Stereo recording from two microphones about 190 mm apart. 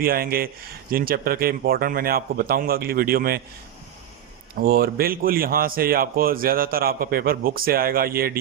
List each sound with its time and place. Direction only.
0.0 s a man's voice: 50° right (ahead or behind)
4.5 s a man's voice: 50° right (ahead or behind)